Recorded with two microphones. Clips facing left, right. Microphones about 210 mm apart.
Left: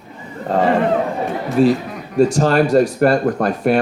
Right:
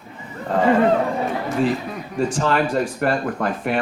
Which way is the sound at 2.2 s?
40° left (ahead or behind).